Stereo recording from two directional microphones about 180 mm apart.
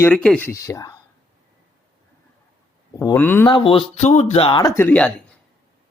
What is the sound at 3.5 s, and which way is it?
Speech, 30° left (ahead or behind).